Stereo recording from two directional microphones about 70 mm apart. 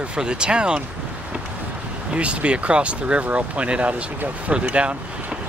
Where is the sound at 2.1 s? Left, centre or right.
Centre.